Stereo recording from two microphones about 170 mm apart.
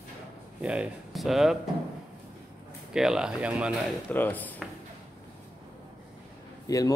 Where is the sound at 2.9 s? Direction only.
5° right (ahead or behind).